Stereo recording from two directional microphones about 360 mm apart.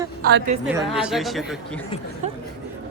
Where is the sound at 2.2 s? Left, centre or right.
Centre.